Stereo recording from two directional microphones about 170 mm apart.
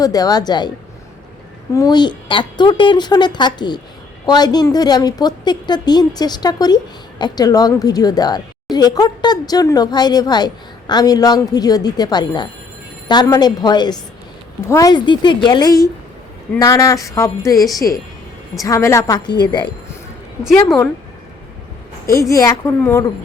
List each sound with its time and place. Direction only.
0.0 s a woman's voice: 20° left (ahead or behind)
1.7 s a woman's voice: 20° left (ahead or behind)
20.4 s a woman's voice: centre (ahead or behind)
22.0 s a woman's voice: 20° left (ahead or behind)